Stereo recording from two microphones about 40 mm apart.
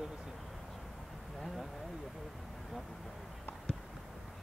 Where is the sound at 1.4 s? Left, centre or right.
Centre.